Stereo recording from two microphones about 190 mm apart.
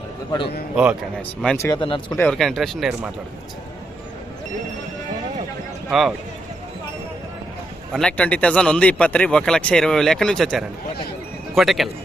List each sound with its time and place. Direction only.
0.3 s speech: 25° left (ahead or behind)
0.8 s speech: 5° right (ahead or behind)
1.5 s speech: 15° left (ahead or behind)
1.8 s speech: 25° left (ahead or behind)
2.1 s speech: 5° left (ahead or behind)
5.9 s speech: centre (ahead or behind)
7.9 s speech: 5° left (ahead or behind)